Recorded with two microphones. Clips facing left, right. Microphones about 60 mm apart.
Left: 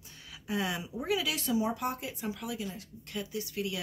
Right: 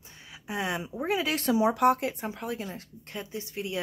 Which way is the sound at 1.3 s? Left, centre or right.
Right.